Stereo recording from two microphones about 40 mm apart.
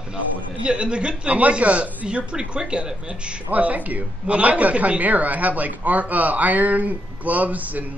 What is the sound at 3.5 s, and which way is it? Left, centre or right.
Speech, right.